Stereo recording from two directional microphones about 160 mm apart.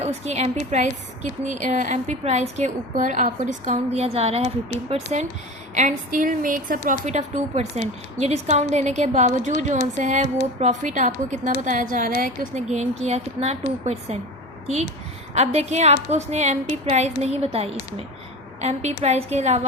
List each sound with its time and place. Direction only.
0.0 s a woman's voice: 40° right (ahead or behind)
5.7 s a woman's voice: 55° right (ahead or behind)
12.6 s a woman's voice: 45° right (ahead or behind)
15.4 s a woman's voice: 45° right (ahead or behind)